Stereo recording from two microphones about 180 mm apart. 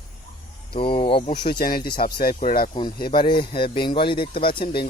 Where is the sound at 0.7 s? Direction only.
30° left (ahead or behind).